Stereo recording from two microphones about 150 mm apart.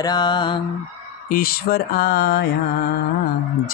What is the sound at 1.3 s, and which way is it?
Speech, 85° left.